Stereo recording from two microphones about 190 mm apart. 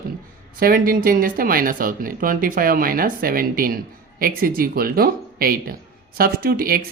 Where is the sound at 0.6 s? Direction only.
50° right (ahead or behind).